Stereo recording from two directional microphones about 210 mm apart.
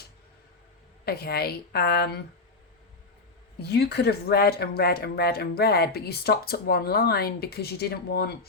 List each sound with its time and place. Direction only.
1.0 s speech: 50° left (ahead or behind)
3.6 s speech: 50° left (ahead or behind)